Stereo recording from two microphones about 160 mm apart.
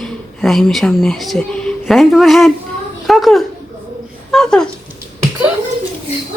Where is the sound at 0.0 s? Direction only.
Centre (ahead or behind).